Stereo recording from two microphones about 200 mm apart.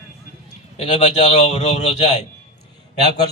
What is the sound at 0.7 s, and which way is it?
A man's voice, 35° left (ahead or behind).